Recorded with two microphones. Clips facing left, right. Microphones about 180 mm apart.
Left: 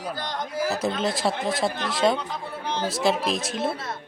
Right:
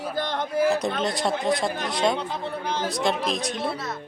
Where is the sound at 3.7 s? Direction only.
30° left (ahead or behind).